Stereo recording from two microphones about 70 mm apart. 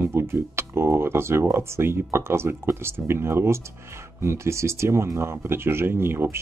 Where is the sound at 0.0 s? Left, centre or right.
Right.